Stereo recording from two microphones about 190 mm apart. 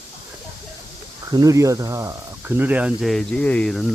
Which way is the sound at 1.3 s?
20° right (ahead or behind).